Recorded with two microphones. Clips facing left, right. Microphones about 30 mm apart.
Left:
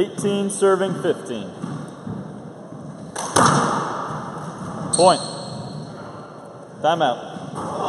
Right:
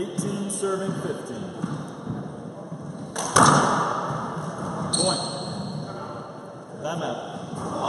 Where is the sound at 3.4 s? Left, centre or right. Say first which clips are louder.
Left 1 dB; centre.